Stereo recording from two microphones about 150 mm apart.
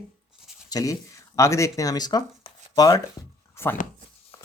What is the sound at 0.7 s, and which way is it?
Speech, 25° left (ahead or behind).